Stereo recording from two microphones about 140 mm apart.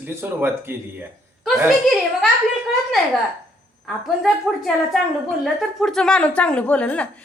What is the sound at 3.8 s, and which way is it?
A woman's voice, centre (ahead or behind).